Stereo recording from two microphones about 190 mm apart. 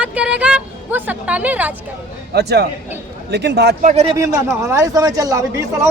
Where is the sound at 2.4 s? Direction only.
60° right (ahead or behind).